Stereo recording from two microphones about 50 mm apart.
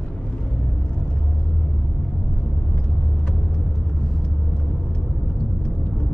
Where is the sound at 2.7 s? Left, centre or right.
Centre.